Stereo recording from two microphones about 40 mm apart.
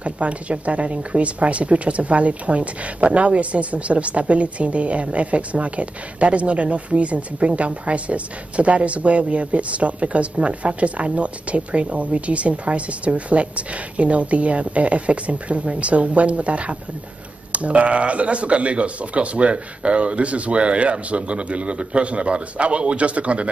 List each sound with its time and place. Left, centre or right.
0.0 s speech: right